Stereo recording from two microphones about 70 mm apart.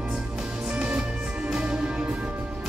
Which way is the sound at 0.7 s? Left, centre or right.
Centre.